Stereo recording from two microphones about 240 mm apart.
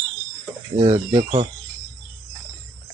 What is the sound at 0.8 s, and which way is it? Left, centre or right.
Speech, right.